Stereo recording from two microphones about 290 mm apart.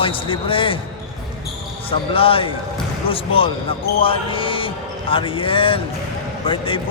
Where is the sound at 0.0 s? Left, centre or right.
Centre.